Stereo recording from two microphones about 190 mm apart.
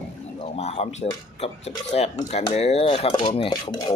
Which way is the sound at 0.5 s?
35° left (ahead or behind).